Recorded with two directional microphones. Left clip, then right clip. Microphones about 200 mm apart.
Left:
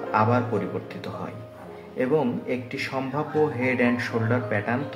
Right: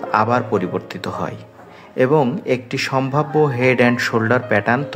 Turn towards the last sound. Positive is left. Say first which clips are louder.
# right 9 dB
turn(degrees=-40)  # may be behind; listen again after turning